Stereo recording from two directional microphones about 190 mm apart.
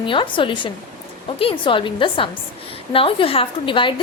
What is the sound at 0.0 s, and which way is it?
A woman's voice, 25° left (ahead or behind).